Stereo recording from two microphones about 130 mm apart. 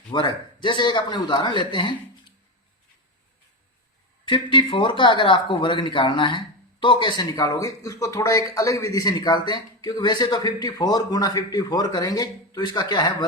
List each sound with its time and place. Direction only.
0.1 s speech: 35° left (ahead or behind)
4.3 s speech: 40° left (ahead or behind)